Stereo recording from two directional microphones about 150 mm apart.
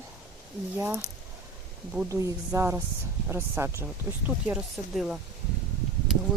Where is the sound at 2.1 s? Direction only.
20° right (ahead or behind).